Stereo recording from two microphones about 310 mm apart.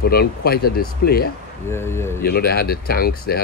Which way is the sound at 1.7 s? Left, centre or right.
Centre.